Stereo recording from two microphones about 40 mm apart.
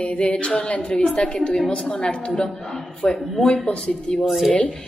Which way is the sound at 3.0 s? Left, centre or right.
Left.